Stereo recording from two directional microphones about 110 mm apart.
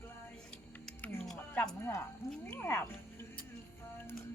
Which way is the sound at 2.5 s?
20° left (ahead or behind).